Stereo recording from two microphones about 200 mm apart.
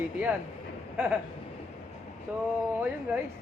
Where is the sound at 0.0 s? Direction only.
10° right (ahead or behind).